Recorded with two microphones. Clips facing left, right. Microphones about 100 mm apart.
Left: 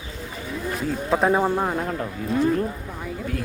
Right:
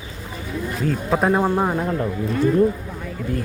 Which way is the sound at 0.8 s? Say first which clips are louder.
Right 1 dB; centre (ahead or behind).